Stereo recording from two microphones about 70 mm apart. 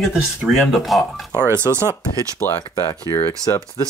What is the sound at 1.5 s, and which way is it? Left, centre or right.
Speech, right.